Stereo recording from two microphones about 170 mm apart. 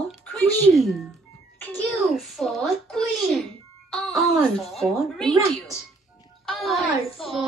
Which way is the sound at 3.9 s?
5° left (ahead or behind).